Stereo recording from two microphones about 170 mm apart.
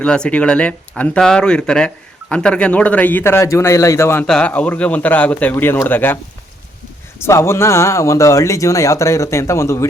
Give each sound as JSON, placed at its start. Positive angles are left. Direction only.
{"t": 0.0, "sound": "speech", "side_deg": 5}
{"t": 7.2, "sound": "speech", "side_deg": 15}